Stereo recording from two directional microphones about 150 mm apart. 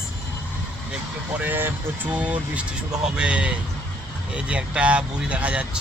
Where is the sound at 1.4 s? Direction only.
15° right (ahead or behind).